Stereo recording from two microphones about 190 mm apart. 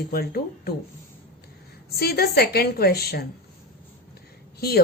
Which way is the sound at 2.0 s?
55° left (ahead or behind).